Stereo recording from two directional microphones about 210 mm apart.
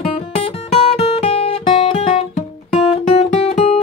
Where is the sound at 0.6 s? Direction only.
30° left (ahead or behind).